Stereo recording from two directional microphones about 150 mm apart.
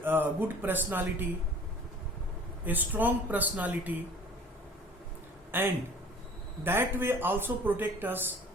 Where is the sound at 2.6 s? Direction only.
10° right (ahead or behind).